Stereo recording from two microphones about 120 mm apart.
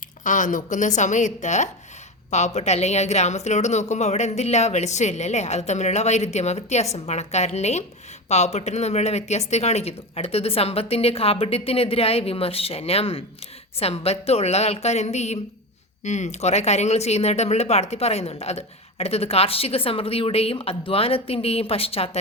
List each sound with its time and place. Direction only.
0.3 s speech: 90° left
2.3 s speech: 70° left (ahead or behind)